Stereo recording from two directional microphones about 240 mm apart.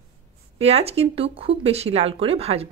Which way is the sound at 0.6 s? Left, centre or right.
Right.